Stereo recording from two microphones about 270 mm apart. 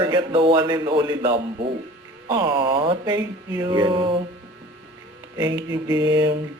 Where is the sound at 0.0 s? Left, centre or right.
Centre.